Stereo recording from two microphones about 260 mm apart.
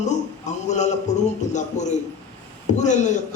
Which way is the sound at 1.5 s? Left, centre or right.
Left.